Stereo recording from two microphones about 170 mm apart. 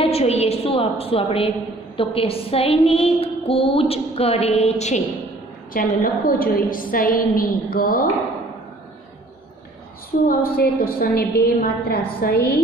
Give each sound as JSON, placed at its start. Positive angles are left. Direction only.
{"t": 0.0, "sound": "a sound", "side_deg": 35}
{"t": 5.7, "sound": "a woman's voice", "side_deg": 55}
{"t": 10.2, "sound": "a woman's voice", "side_deg": 60}